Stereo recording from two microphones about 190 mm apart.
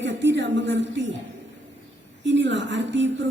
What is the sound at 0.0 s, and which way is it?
A woman's voice, 70° right (ahead or behind).